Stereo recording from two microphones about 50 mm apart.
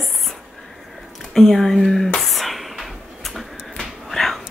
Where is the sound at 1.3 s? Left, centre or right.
Centre.